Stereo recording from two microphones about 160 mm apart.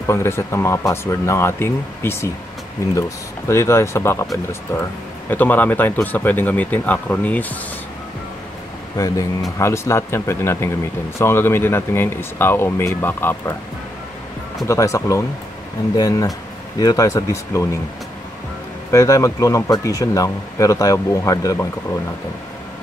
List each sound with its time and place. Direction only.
0.1 s speech: 15° left (ahead or behind)
5.3 s speech: 10° left (ahead or behind)
8.9 s speech: 20° left (ahead or behind)
14.7 s speech: 20° left (ahead or behind)
18.9 s speech: 20° left (ahead or behind)